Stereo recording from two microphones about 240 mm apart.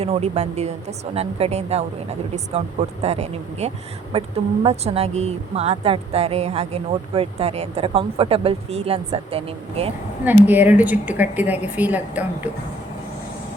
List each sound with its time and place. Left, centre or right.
0.0 s a woman's voice: right
10.2 s a woman's voice: centre